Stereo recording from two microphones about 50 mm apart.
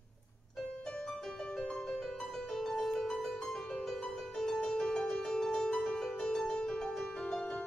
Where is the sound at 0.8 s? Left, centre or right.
Centre.